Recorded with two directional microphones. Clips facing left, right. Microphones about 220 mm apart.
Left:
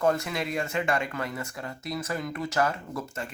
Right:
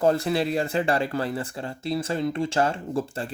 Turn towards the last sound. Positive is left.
turn(degrees=-30)  # may be behind; listen again after turning